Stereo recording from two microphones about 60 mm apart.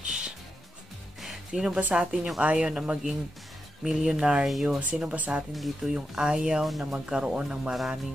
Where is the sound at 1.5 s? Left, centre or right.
Centre.